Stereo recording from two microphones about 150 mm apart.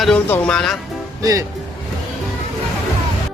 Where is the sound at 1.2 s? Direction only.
20° right (ahead or behind).